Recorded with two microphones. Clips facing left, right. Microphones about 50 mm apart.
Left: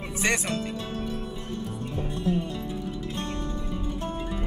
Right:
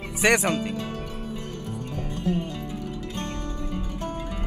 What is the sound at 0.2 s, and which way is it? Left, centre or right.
Speech, right.